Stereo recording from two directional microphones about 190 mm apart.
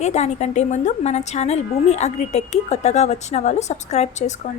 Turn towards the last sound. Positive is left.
turn(degrees=35)  # may be behind; listen again after turning